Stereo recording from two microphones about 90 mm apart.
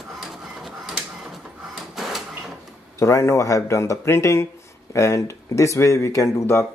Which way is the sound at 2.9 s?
30° left (ahead or behind).